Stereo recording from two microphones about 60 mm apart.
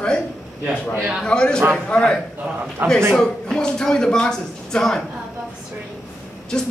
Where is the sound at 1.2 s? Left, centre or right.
Centre.